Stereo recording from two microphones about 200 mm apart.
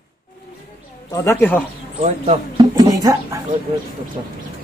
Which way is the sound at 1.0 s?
15° left (ahead or behind).